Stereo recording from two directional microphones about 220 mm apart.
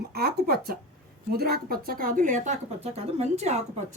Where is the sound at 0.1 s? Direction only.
45° right (ahead or behind).